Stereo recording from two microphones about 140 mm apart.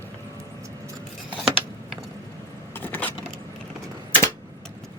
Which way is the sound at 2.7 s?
10° left (ahead or behind).